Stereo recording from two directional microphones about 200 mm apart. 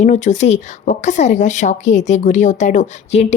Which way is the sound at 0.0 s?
35° left (ahead or behind).